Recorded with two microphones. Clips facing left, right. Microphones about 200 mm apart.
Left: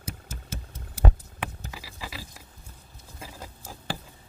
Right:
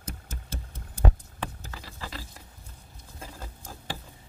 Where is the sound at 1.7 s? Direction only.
10° left (ahead or behind).